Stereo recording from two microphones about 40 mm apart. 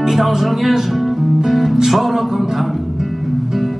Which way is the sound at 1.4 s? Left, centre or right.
Centre.